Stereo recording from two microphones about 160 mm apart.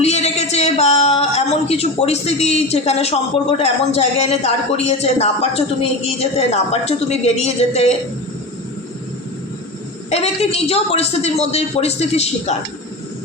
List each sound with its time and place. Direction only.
0.0 s a sound: 40° left (ahead or behind)
3.6 s speech: 40° left (ahead or behind)
10.1 s speech: 40° left (ahead or behind)